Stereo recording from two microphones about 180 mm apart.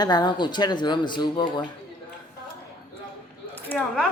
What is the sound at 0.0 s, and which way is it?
Speech, 25° left (ahead or behind).